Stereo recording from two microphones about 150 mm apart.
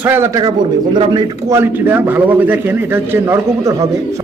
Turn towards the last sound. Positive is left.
turn(degrees=-20)  # may be behind; listen again after turning